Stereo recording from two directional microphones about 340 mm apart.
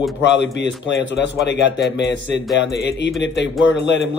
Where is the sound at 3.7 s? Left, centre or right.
Left.